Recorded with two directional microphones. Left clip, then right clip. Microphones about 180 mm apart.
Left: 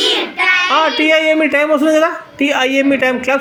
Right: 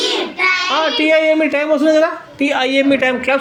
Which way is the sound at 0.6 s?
15° left (ahead or behind).